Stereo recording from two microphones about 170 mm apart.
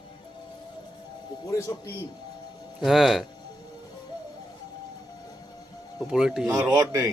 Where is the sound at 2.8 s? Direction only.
Centre (ahead or behind).